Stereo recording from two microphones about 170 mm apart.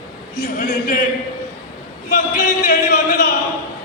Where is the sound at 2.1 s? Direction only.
55° left (ahead or behind).